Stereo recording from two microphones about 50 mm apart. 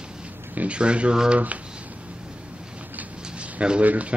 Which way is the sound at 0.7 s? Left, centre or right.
Right.